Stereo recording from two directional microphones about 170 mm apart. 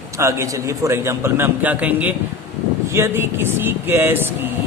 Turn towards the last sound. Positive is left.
turn(degrees=-15)  # may be behind; listen again after turning